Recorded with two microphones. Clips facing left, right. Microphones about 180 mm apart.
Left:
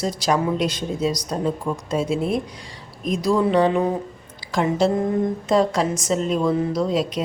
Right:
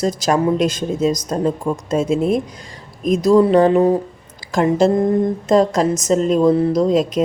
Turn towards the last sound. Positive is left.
turn(degrees=-45)  # may be behind; listen again after turning